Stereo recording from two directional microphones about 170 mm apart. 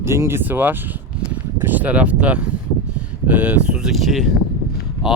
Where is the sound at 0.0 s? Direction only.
15° right (ahead or behind).